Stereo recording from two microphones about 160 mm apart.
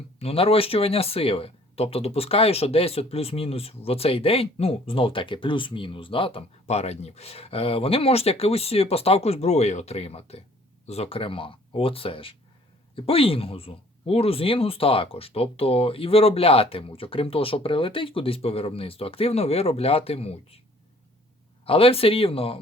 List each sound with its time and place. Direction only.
0.2 s speech: 35° left (ahead or behind)
21.7 s speech: 35° left (ahead or behind)